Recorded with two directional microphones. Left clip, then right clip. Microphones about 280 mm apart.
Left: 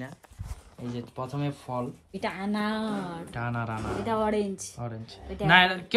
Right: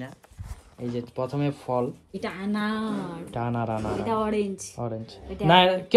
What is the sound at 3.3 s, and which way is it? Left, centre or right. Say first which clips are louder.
Speech: right 6 dB; left.